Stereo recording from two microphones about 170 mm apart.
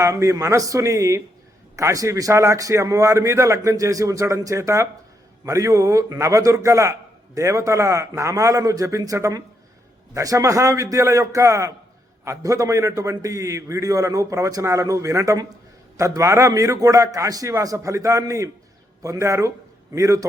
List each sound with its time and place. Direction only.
0.0 s a man's voice: 20° right (ahead or behind)